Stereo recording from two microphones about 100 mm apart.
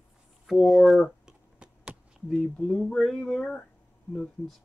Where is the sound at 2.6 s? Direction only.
5° left (ahead or behind).